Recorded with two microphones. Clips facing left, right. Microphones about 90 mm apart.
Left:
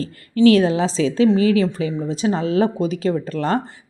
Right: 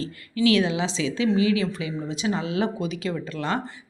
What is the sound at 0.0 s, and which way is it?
Speech, 40° left (ahead or behind).